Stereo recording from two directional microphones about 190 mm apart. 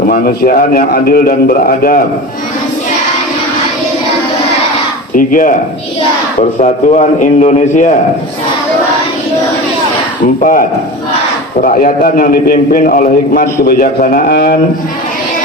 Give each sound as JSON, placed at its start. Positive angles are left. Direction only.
{"t": 0.1, "sound": "a man's voice", "side_deg": 50}
{"t": 5.1, "sound": "a man's voice", "side_deg": 45}
{"t": 6.6, "sound": "a man's voice", "side_deg": 40}
{"t": 10.4, "sound": "a man's voice", "side_deg": 45}